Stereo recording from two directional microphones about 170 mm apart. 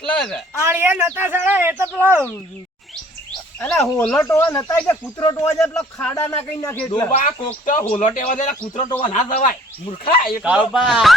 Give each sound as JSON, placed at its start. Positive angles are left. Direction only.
{"t": 0.0, "sound": "speech", "side_deg": 5}
{"t": 0.6, "sound": "speech", "side_deg": -10}
{"t": 3.8, "sound": "speech", "side_deg": 5}
{"t": 4.3, "sound": "speech", "side_deg": 20}
{"t": 5.5, "sound": "speech", "side_deg": 5}
{"t": 7.2, "sound": "speech", "side_deg": 50}
{"t": 10.1, "sound": "speech", "side_deg": 55}
{"t": 10.4, "sound": "speech", "side_deg": -5}